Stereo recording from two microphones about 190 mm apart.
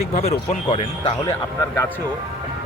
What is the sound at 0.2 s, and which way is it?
Speech, 35° left (ahead or behind).